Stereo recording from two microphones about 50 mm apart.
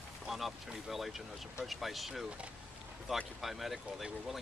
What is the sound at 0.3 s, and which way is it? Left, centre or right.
Speech, centre.